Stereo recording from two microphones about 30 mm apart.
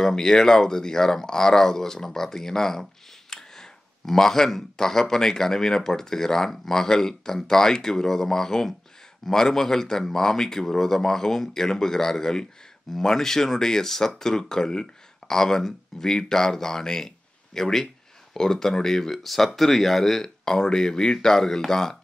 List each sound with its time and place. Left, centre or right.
0.0 s speech: centre